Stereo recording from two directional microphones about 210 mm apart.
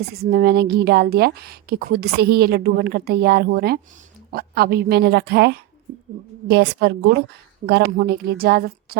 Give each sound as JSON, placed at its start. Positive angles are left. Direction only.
{"t": 0.1, "sound": "a woman's voice", "side_deg": -50}